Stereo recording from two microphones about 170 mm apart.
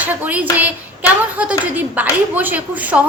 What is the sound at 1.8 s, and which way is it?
Speech, 10° right (ahead or behind).